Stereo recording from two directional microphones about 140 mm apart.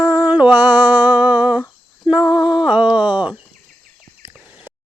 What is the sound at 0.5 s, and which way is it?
Speech, 10° right (ahead or behind).